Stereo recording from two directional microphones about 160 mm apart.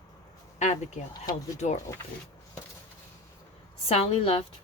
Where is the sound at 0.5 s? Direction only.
45° left (ahead or behind).